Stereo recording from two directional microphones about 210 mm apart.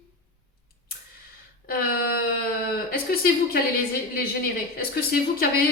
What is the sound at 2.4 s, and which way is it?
Speech, 45° left (ahead or behind).